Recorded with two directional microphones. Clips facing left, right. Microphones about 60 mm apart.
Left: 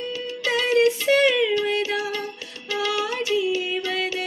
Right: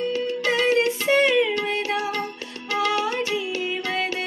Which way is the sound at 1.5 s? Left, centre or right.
Right.